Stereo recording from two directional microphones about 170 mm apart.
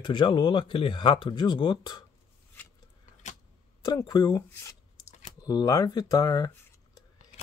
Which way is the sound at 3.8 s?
20° left (ahead or behind).